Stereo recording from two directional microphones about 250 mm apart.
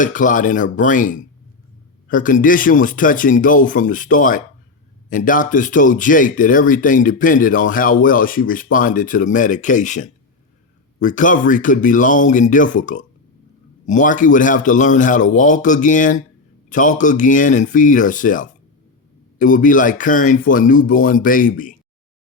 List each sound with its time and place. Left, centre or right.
0.0 s speech: left